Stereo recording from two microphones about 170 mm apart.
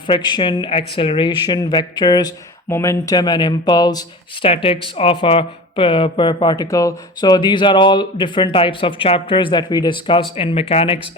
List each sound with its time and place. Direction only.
0.1 s speech: 25° left (ahead or behind)